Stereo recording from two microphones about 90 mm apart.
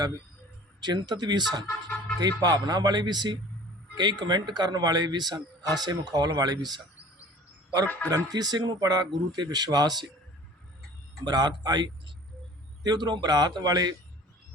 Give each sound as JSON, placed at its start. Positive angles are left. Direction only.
{"t": 0.8, "sound": "speech", "side_deg": -50}
{"t": 8.1, "sound": "speech", "side_deg": -45}
{"t": 11.3, "sound": "speech", "side_deg": -50}